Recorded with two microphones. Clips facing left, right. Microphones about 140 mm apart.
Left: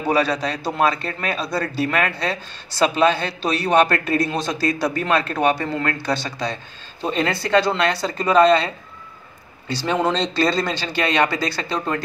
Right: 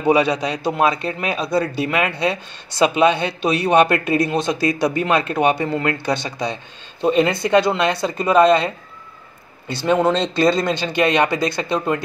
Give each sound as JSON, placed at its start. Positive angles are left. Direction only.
{"t": 0.1, "sound": "speech", "side_deg": -15}
{"t": 9.8, "sound": "speech", "side_deg": -10}